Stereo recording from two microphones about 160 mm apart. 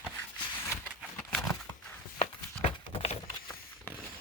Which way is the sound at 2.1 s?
35° left (ahead or behind).